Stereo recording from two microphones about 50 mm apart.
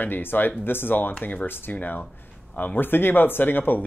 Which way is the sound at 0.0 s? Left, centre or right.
Left.